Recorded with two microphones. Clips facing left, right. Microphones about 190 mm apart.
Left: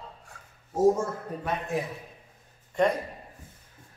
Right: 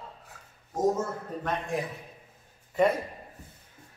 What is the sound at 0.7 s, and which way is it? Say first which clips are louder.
A man's voice: left 4 dB; 10° left (ahead or behind).